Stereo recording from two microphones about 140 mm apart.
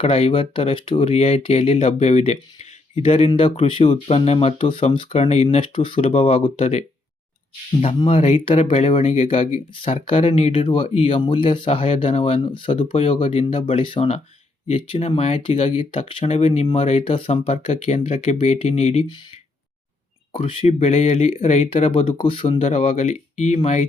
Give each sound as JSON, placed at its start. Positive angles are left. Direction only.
{"t": 0.0, "sound": "speech", "side_deg": 45}
{"t": 8.0, "sound": "speech", "side_deg": 50}
{"t": 14.7, "sound": "speech", "side_deg": 50}
{"t": 20.3, "sound": "speech", "side_deg": 40}